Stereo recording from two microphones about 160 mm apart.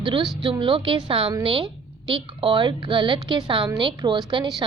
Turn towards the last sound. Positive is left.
turn(degrees=-30)  # may be behind; listen again after turning